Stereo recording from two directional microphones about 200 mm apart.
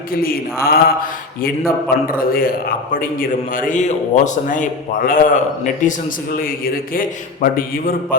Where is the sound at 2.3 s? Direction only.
45° left (ahead or behind).